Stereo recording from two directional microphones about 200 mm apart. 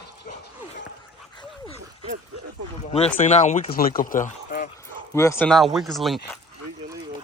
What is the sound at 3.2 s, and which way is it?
Speech, 35° left (ahead or behind).